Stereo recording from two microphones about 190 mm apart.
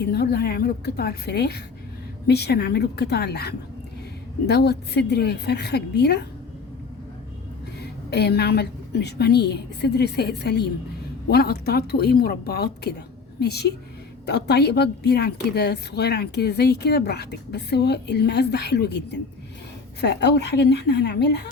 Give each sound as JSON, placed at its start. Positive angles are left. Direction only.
{"t": 0.0, "sound": "a woman's voice", "side_deg": 55}
{"t": 7.8, "sound": "a woman's voice", "side_deg": 60}